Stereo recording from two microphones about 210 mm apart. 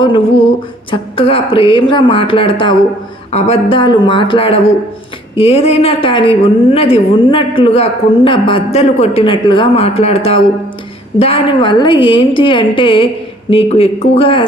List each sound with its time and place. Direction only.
0.0 s a woman's voice: 25° left (ahead or behind)